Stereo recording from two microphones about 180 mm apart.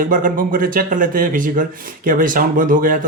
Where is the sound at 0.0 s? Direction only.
50° right (ahead or behind).